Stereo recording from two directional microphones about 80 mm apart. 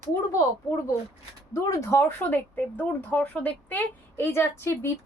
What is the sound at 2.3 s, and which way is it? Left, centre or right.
Speech, left.